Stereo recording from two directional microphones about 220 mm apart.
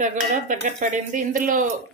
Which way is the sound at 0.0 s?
35° right (ahead or behind).